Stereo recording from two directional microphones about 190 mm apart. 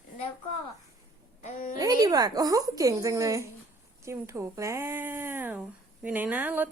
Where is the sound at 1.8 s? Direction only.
20° right (ahead or behind).